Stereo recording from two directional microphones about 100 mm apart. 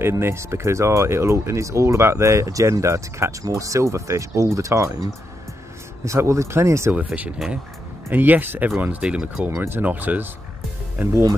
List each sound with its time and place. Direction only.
0.0 s speech: 25° right (ahead or behind)
8.1 s speech: 20° right (ahead or behind)